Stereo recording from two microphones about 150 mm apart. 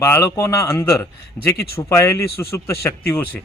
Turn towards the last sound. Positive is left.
turn(degrees=10)  # may be behind; listen again after turning